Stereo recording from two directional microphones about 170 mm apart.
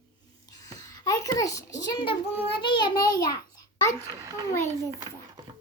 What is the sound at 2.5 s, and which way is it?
Child singing, 25° left (ahead or behind).